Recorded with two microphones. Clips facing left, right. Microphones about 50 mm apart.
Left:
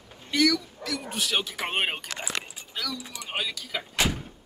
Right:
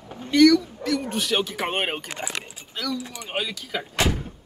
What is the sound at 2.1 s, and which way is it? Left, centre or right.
Speech, centre.